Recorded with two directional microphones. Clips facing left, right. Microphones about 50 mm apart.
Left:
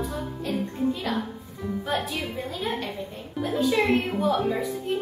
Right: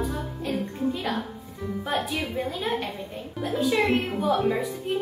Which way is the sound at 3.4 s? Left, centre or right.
Centre.